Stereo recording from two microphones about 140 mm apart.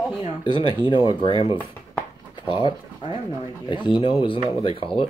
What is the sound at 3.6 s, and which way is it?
Speech, 35° left (ahead or behind).